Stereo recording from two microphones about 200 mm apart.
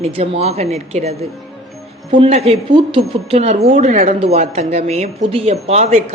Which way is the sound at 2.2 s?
30° right (ahead or behind).